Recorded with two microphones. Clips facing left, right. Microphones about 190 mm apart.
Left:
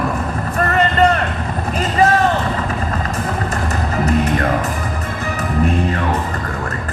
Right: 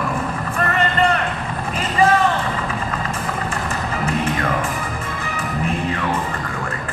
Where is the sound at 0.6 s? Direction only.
40° left (ahead or behind).